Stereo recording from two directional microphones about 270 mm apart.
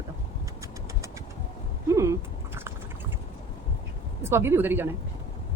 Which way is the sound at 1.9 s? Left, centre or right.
Centre.